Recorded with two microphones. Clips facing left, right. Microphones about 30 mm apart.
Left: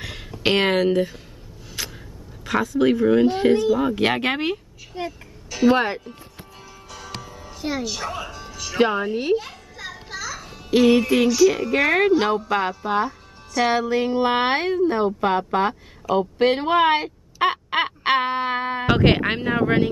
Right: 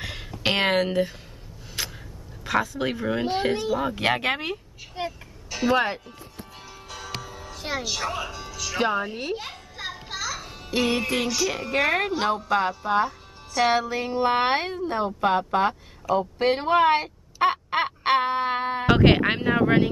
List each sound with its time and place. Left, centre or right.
0.0 s a sound: centre
2.4 s speech: centre
4.9 s music: centre
6.9 s music: centre
7.5 s speech: centre
8.5 s speech: centre
9.8 s music: centre
10.1 s music: centre
10.8 s speech: centre
14.4 s a woman's voice: centre